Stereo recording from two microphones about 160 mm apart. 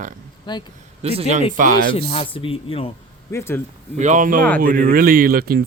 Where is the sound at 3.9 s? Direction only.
50° right (ahead or behind); by 5.6 s 65° right (ahead or behind).